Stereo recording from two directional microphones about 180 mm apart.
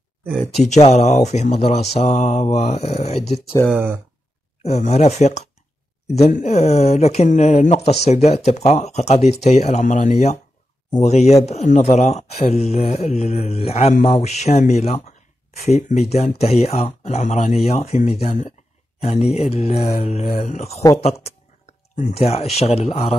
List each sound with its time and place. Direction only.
0.5 s speech: 40° left (ahead or behind)
3.7 s speech: 10° right (ahead or behind)
4.6 s speech: 35° left (ahead or behind)
19.2 s speech: centre (ahead or behind)
19.5 s speech: 35° left (ahead or behind)